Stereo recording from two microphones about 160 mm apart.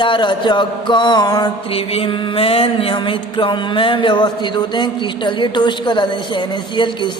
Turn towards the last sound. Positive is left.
turn(degrees=30)  # may be behind; listen again after turning